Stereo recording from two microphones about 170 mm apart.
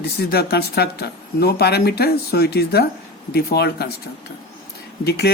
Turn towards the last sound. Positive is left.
turn(degrees=70)  # may be behind; listen again after turning